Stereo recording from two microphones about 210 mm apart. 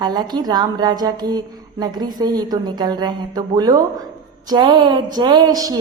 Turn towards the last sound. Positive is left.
turn(degrees=-15)  # may be behind; listen again after turning